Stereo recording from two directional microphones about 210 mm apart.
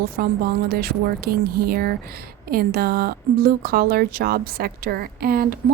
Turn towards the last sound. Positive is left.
turn(degrees=-45)  # may be behind; listen again after turning